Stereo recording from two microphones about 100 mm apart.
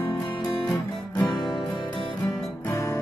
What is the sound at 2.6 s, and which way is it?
Music, 30° left (ahead or behind).